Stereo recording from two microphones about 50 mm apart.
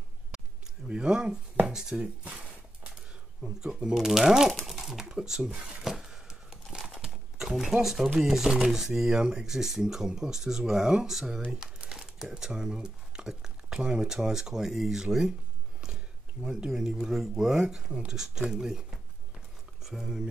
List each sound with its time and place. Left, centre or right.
0.8 s speech: centre
1.7 s a sound: centre
2.0 s a sound: right
3.4 s speech: centre
5.9 s crumpling: centre
6.9 s speech: centre
16.4 s speech: centre